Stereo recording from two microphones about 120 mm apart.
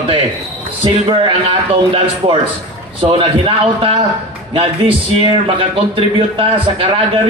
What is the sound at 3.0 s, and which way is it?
A man's voice, 45° right (ahead or behind).